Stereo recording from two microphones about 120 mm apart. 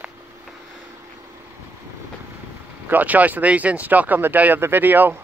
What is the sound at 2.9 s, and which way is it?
Speech, 15° right (ahead or behind).